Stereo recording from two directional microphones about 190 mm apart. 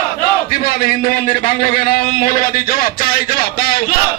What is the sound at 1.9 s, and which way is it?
A man's voice, 50° left (ahead or behind).